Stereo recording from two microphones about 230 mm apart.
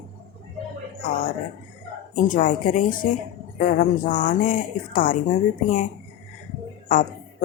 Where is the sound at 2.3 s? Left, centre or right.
Left.